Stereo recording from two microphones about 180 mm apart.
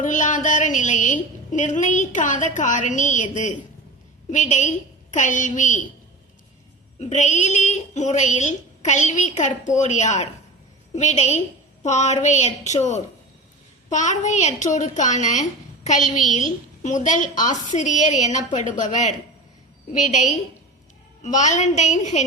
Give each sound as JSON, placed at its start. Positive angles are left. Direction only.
{"t": 0.0, "sound": "a woman's voice", "side_deg": 45}
{"t": 7.0, "sound": "a woman's voice", "side_deg": 40}
{"t": 13.9, "sound": "a woman's voice", "side_deg": 40}